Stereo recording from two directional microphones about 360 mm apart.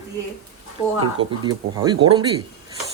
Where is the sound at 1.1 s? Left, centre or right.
Centre.